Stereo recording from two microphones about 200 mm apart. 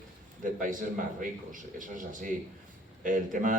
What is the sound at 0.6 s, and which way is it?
Speech, 40° right (ahead or behind).